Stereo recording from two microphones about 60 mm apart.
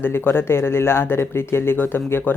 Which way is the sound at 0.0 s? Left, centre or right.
Left.